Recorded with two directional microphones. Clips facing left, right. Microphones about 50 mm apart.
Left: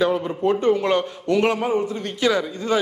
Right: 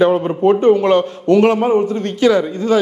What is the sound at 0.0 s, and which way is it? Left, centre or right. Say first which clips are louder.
A man's voice: right 7 dB; right.